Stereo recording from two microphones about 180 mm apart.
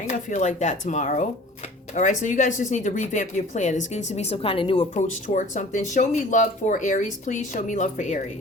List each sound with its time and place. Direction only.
0.1 s speech: 40° left (ahead or behind)
4.9 s speech: 45° left (ahead or behind)